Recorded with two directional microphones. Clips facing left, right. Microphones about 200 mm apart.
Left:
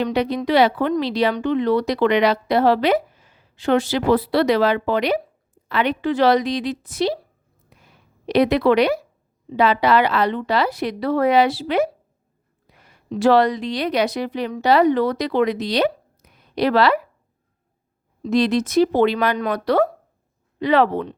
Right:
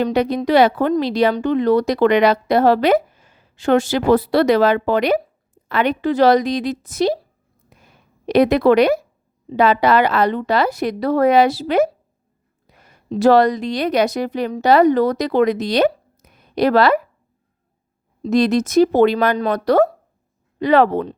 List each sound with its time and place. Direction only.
0.0 s speech: 45° right (ahead or behind)
7.7 s a sound: 45° right (ahead or behind)
9.6 s speech: 45° right (ahead or behind)
12.7 s a sound: 45° right (ahead or behind)
13.1 s speech: 40° right (ahead or behind)
18.3 s speech: 45° right (ahead or behind)